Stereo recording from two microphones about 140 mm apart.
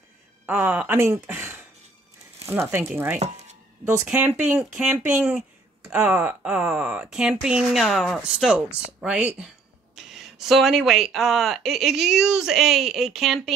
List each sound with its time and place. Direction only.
0.5 s speech: 10° right (ahead or behind)
4.5 s speech: 5° right (ahead or behind)